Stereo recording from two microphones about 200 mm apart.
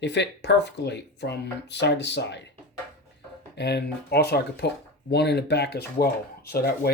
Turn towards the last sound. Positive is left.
turn(degrees=50)  # may be behind; listen again after turning